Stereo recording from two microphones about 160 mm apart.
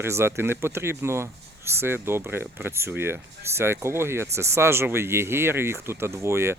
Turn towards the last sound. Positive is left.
turn(degrees=-15)  # may be behind; listen again after turning